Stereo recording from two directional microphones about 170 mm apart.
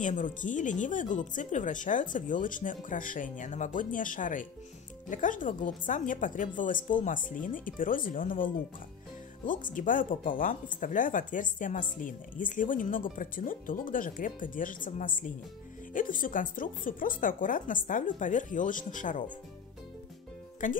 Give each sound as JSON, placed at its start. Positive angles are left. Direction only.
{"t": 0.0, "sound": "speech", "side_deg": 50}
{"t": 9.5, "sound": "speech", "side_deg": 55}
{"t": 20.6, "sound": "speech", "side_deg": 50}